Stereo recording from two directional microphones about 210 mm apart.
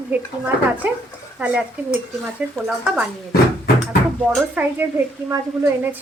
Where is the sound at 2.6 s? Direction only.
5° right (ahead or behind).